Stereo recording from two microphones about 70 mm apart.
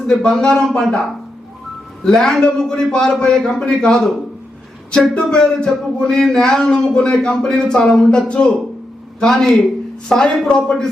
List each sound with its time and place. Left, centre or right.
0.1 s speech: centre
2.0 s speech: centre